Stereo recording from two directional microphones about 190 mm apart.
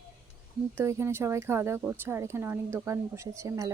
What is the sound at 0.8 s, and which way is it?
A woman's voice, 15° right (ahead or behind).